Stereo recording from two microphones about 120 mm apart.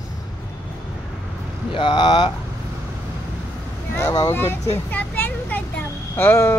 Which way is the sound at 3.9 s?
30° left (ahead or behind).